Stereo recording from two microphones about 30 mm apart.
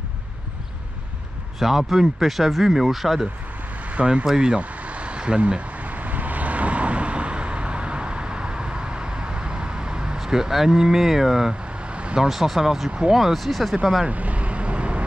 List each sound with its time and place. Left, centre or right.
1.6 s speech: centre
3.9 s speech: right
4.6 s vehicle: right
5.8 s vehicle: right
10.1 s speech: centre
11.9 s vehicle: right
12.3 s speech: centre
14.0 s vehicle: right